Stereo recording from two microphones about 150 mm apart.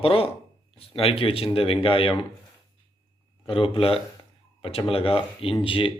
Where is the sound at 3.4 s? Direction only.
35° left (ahead or behind).